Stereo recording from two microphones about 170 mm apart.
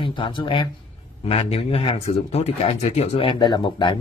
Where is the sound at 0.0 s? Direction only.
30° left (ahead or behind).